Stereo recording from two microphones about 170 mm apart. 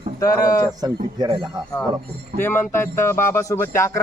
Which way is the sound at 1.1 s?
30° right (ahead or behind).